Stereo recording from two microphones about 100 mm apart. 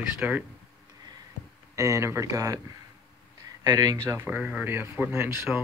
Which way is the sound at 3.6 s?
35° right (ahead or behind).